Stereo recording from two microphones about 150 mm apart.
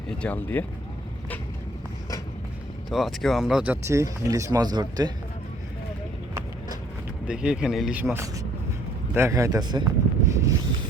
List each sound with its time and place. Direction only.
0.1 s speech: 10° left (ahead or behind)
2.9 s speech: centre (ahead or behind); by 5.1 s 25° right (ahead or behind)
7.3 s speech: 5° right (ahead or behind)
9.1 s speech: 20° right (ahead or behind)